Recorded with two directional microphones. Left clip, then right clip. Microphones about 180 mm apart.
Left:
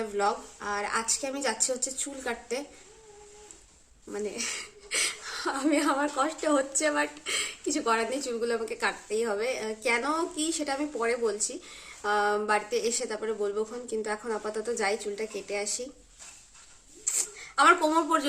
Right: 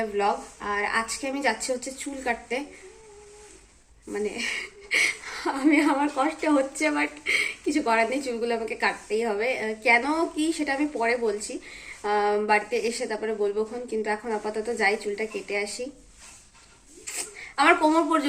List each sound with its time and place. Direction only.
0.0 s speech: 15° left (ahead or behind)
4.1 s speech: 15° left (ahead or behind)
17.2 s speech: 15° left (ahead or behind)